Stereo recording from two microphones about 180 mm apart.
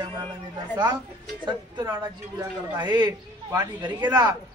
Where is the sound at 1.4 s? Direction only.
25° right (ahead or behind).